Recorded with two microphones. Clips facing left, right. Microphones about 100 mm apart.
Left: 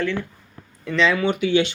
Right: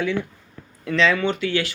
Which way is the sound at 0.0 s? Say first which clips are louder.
Right 1 dB; 10° right (ahead or behind).